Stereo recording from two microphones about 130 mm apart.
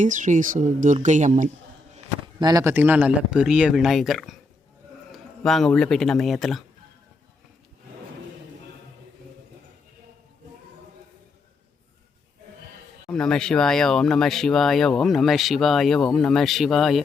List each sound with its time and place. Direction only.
0.0 s speech: 75° right (ahead or behind)
0.9 s speech: 65° right (ahead or behind)
2.4 s speech: 30° right (ahead or behind)
2.7 s speech: 15° right (ahead or behind)
13.1 s speech: 5° left (ahead or behind)